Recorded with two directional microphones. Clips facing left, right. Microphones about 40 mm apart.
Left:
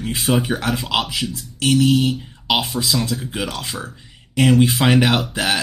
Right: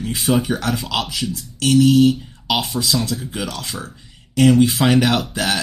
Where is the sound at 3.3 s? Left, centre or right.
Centre.